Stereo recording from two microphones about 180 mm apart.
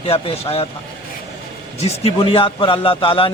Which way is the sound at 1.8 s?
35° left (ahead or behind).